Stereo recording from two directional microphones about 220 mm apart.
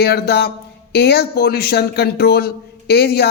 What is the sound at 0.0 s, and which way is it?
A man's voice, 45° left (ahead or behind).